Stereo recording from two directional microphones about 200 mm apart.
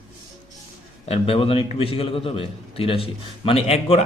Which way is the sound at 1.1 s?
30° left (ahead or behind).